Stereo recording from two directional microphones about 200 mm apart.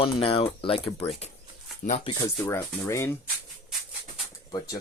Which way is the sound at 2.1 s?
10° left (ahead or behind).